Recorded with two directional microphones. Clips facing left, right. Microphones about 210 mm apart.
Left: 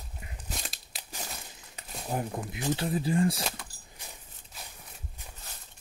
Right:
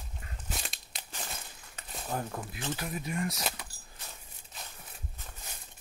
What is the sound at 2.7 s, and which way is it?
Speech, 30° left (ahead or behind).